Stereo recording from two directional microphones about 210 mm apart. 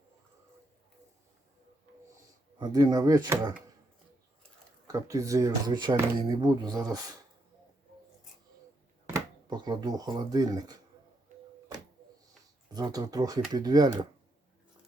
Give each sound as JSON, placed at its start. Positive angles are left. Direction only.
{"t": 2.6, "sound": "speech", "side_deg": -20}
{"t": 4.9, "sound": "speech", "side_deg": -15}
{"t": 9.0, "sound": "speech", "side_deg": -15}
{"t": 12.7, "sound": "speech", "side_deg": -20}